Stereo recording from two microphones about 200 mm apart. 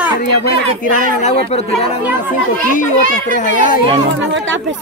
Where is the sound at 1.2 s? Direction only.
30° left (ahead or behind).